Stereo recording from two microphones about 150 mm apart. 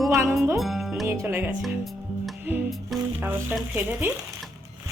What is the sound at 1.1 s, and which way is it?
Speech, 15° right (ahead or behind).